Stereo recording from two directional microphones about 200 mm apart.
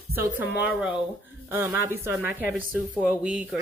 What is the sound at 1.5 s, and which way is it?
A woman's voice, 10° right (ahead or behind).